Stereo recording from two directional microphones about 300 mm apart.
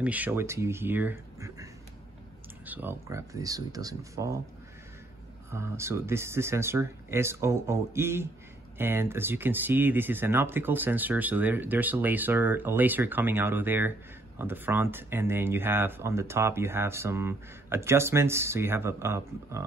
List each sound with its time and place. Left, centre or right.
0.0 s speech: centre
5.5 s speech: centre